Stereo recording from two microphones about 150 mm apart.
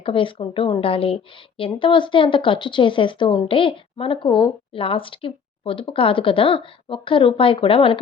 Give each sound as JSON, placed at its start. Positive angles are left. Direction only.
{"t": 0.0, "sound": "a woman's voice", "side_deg": 35}